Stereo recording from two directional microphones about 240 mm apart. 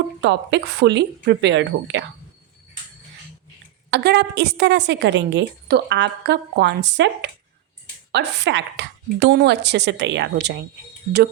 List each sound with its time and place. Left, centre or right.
0.2 s a woman's voice: right
3.9 s a woman's voice: right